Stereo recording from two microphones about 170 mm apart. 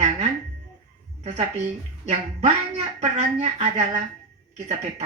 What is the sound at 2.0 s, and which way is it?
Speech, 40° right (ahead or behind).